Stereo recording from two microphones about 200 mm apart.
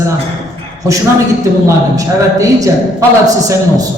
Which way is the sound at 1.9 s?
15° right (ahead or behind).